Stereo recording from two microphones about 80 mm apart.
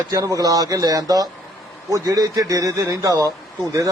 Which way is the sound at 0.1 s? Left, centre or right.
Right.